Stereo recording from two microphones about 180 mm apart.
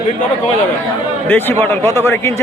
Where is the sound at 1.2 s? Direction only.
10° left (ahead or behind).